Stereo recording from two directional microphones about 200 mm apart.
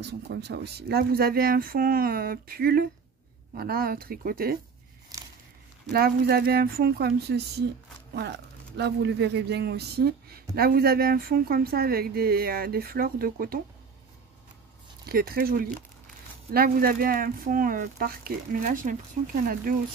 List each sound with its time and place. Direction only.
0.0 s speech: 55° right (ahead or behind)
5.9 s speech: 50° right (ahead or behind)
15.0 s speech: 50° right (ahead or behind)